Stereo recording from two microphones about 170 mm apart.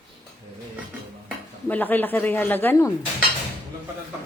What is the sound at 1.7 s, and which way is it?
Speech, 10° left (ahead or behind).